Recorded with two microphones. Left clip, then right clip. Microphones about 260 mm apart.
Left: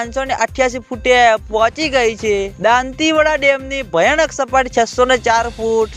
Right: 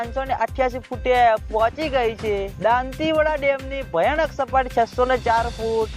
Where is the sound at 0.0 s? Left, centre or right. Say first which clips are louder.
Left 5 dB; left.